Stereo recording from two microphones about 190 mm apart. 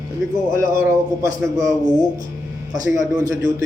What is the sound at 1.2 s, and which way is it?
Speech, 15° right (ahead or behind).